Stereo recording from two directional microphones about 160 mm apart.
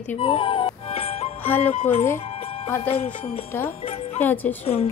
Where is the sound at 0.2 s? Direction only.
30° left (ahead or behind).